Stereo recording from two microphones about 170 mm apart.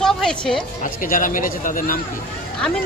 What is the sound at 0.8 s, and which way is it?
A man's voice, 55° left (ahead or behind).